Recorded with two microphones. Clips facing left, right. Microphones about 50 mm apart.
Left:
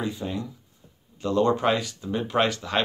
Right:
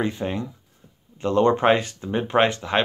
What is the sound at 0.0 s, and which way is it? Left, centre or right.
Speech, right.